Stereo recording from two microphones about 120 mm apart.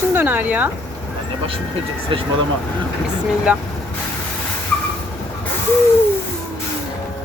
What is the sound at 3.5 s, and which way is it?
Speech, 10° right (ahead or behind).